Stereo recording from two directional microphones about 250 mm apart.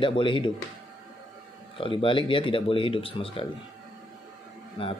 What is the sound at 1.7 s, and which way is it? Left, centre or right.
Speech, left.